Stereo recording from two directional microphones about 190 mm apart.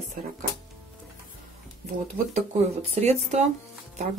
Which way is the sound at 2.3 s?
35° right (ahead or behind).